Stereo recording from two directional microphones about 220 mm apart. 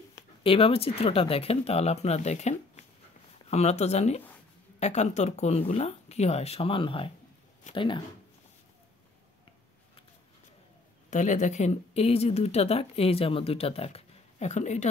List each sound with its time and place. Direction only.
0.4 s speech: 25° left (ahead or behind)
11.1 s speech: 35° left (ahead or behind)